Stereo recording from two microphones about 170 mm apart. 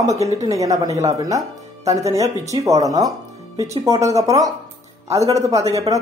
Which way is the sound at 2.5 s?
20° right (ahead or behind).